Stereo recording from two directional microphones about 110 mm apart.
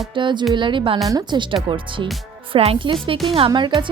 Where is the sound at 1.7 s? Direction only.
55° right (ahead or behind).